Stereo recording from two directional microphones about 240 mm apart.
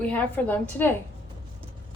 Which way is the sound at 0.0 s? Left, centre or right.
Centre.